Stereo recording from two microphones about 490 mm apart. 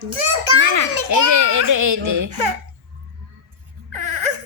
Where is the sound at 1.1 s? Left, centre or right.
Right.